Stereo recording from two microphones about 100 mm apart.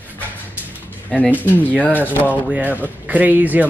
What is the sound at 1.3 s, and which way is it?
Speech, 20° left (ahead or behind).